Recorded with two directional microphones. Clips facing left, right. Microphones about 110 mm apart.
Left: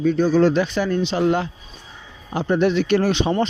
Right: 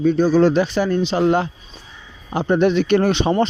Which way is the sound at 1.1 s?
40° right (ahead or behind).